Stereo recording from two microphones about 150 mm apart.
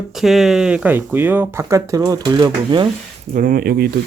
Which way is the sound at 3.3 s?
65° right (ahead or behind).